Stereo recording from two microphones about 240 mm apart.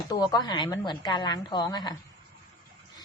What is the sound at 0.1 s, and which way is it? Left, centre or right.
A woman's voice, centre.